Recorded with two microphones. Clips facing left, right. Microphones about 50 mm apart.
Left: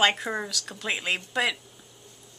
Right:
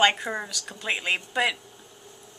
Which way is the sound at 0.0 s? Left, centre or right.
Centre.